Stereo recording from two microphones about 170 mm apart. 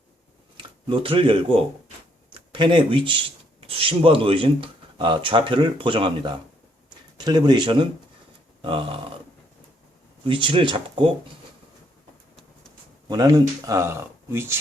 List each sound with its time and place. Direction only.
0.5 s speech: 30° right (ahead or behind)
8.6 s a sound: 30° right (ahead or behind)
10.2 s speech: 30° right (ahead or behind)
13.1 s speech: 20° right (ahead or behind)